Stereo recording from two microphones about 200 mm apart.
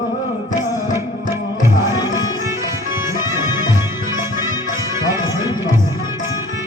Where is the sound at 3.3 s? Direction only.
15° right (ahead or behind).